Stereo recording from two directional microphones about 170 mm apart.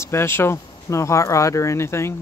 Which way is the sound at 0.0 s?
15° left (ahead or behind).